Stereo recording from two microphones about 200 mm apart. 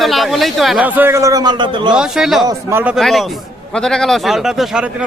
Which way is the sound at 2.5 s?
10° right (ahead or behind).